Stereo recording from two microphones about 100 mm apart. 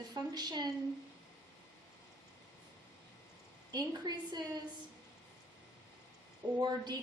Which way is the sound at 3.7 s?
40° right (ahead or behind).